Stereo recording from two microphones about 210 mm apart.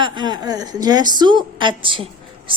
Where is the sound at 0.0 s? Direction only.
20° right (ahead or behind).